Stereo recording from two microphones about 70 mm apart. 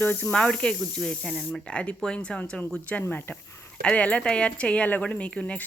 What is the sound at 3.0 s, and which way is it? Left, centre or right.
Speech, left.